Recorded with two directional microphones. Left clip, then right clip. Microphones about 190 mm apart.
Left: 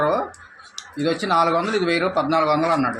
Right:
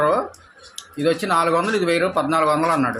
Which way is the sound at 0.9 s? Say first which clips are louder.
Even; 5° right (ahead or behind).